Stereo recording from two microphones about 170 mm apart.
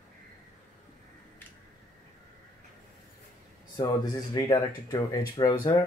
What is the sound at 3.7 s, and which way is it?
Speech, 25° left (ahead or behind).